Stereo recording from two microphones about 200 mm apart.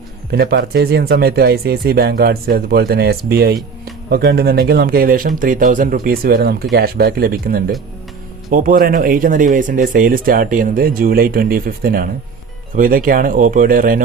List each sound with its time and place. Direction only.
0.3 s speech: 55° right (ahead or behind)